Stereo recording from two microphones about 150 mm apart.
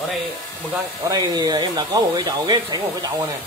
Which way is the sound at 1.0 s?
25° right (ahead or behind).